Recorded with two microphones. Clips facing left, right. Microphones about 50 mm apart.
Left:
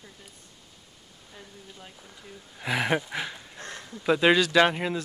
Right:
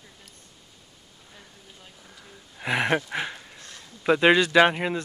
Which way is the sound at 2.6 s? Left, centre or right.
Centre.